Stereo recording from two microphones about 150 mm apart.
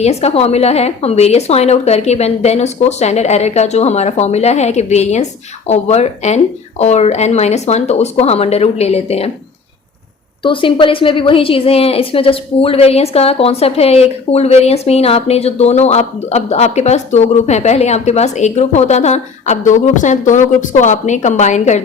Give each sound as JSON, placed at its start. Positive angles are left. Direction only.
{"t": 0.0, "sound": "a woman's voice", "side_deg": 45}
{"t": 10.4, "sound": "a woman's voice", "side_deg": 35}